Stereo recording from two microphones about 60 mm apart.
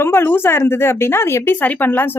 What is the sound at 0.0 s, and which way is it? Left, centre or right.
Speech, left.